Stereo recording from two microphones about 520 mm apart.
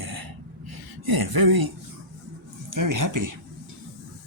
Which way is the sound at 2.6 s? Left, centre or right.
Right.